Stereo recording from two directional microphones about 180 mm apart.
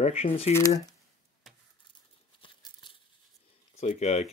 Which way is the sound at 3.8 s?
40° left (ahead or behind).